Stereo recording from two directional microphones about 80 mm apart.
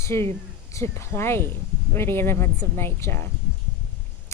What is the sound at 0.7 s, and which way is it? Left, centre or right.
A woman's voice, left.